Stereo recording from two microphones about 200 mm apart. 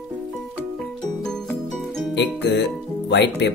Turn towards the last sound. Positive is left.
turn(degrees=60)  # may be behind; listen again after turning